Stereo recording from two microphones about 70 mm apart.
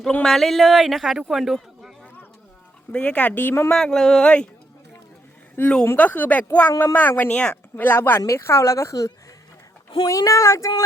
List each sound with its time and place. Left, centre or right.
0.1 s speech: centre
0.3 s a man's voice: centre
2.9 s speech: centre
3.7 s speech: centre
5.5 s speech: centre
8.3 s speech: left